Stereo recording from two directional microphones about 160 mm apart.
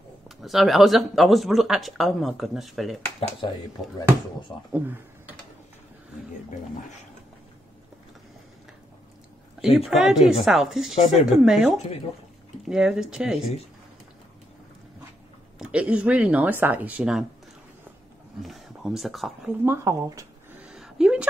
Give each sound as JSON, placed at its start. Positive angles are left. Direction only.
{"t": 0.4, "sound": "speech", "side_deg": 0}
{"t": 3.4, "sound": "speech", "side_deg": 30}
{"t": 4.7, "sound": "speech", "side_deg": -10}
{"t": 9.8, "sound": "speech", "side_deg": 0}
{"t": 15.6, "sound": "speech", "side_deg": -5}
{"t": 18.4, "sound": "speech", "side_deg": 0}
{"t": 19.6, "sound": "speech", "side_deg": -15}
{"t": 20.6, "sound": "a sound", "side_deg": -5}